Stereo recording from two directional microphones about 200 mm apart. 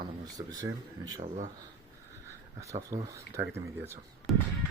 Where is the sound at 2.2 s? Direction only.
15° right (ahead or behind).